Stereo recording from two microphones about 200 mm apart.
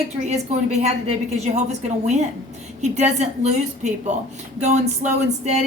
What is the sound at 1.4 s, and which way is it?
Speech, 35° right (ahead or behind).